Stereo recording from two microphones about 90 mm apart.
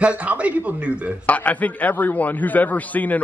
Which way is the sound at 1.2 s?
15° left (ahead or behind).